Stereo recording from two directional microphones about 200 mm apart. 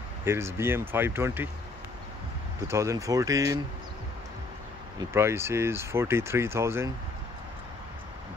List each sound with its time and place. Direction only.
0.2 s speech: 10° right (ahead or behind)
2.7 s speech: 15° right (ahead or behind)
5.1 s speech: 15° right (ahead or behind)